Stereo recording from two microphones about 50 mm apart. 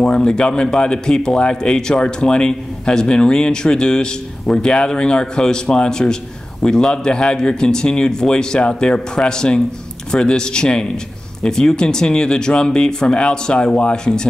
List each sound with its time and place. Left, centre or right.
0.0 s speech: centre